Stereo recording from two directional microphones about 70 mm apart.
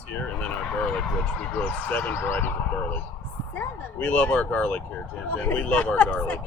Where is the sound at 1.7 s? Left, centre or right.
Left.